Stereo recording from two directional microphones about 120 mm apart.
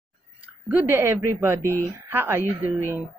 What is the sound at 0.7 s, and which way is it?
A man's voice, 15° right (ahead or behind).